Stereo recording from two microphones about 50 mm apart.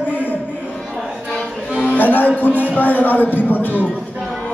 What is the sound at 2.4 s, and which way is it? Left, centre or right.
A man's voice, left.